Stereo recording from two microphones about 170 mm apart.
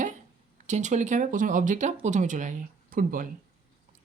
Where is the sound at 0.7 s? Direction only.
45° right (ahead or behind).